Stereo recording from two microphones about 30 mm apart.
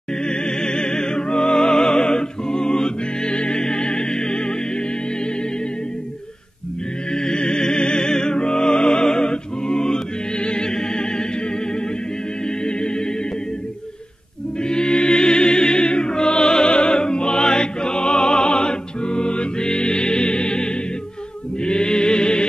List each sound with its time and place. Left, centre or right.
0.2 s music: left
7.1 s music: left
14.6 s music: left